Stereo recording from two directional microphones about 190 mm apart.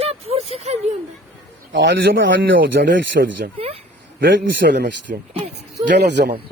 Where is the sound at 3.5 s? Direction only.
30° right (ahead or behind).